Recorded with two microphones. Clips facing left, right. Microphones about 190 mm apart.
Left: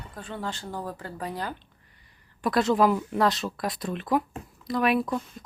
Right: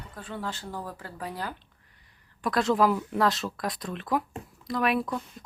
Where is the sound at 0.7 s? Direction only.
20° left (ahead or behind).